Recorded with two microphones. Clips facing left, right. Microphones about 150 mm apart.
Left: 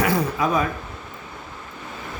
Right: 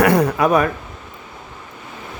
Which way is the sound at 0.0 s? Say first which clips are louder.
Right 7 dB; 65° right (ahead or behind).